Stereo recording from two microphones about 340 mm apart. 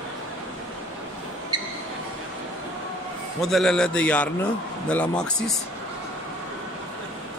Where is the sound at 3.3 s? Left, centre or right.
Centre.